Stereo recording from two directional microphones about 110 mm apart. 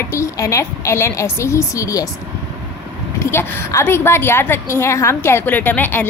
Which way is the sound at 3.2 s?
20° left (ahead or behind).